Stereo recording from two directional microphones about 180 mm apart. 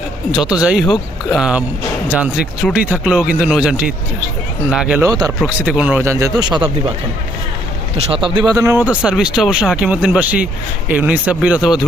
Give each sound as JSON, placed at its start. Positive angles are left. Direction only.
{"t": 0.3, "sound": "speech", "side_deg": -5}
{"t": 5.0, "sound": "speech", "side_deg": -20}
{"t": 5.5, "sound": "speech", "side_deg": -5}
{"t": 7.9, "sound": "speech", "side_deg": -30}